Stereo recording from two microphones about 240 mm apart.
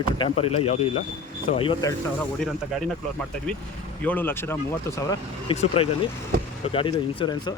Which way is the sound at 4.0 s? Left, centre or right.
Centre.